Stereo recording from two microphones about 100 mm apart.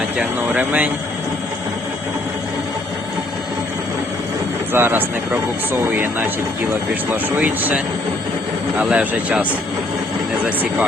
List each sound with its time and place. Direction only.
0.2 s speech: 10° right (ahead or behind)
4.7 s a man's voice: 20° right (ahead or behind)
8.8 s speech: 10° right (ahead or behind)